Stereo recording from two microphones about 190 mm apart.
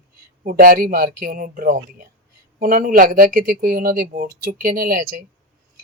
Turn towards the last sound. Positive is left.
turn(degrees=-45)  # may be behind; listen again after turning